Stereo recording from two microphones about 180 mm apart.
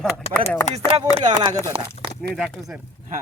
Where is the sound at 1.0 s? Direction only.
25° right (ahead or behind).